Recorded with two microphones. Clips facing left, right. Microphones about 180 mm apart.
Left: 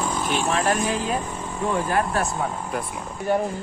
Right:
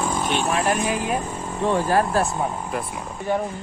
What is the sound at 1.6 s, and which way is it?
Speech, 30° right (ahead or behind).